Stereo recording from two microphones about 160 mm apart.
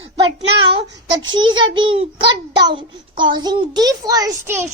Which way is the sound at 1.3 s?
30° right (ahead or behind).